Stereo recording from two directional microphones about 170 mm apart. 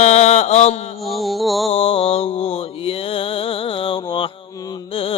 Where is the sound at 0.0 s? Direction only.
40° left (ahead or behind).